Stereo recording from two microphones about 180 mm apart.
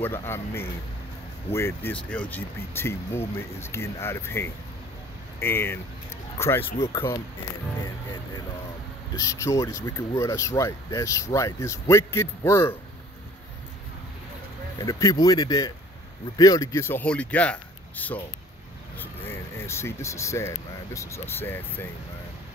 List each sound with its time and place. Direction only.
0.0 s speech: 15° left (ahead or behind)
9.1 s speech: 15° left (ahead or behind)
14.9 s speech: 20° left (ahead or behind)